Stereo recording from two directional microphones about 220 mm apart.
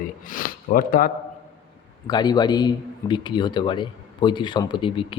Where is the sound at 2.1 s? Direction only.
20° left (ahead or behind).